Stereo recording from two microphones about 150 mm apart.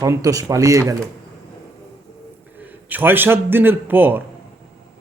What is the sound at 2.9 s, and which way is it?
A man's voice, 15° right (ahead or behind).